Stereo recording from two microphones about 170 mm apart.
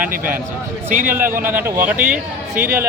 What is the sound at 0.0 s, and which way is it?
Speech, 55° right (ahead or behind).